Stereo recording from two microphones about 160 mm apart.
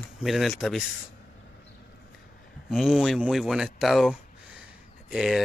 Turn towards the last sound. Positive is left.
turn(degrees=-5)  # may be behind; listen again after turning